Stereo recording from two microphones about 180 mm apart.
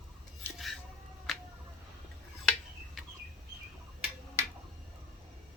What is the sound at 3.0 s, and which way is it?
Bird, centre (ahead or behind).